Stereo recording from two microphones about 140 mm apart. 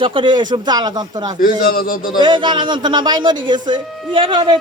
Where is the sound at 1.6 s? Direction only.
90° left.